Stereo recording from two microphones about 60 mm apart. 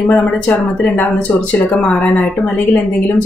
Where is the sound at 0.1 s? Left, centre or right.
Left.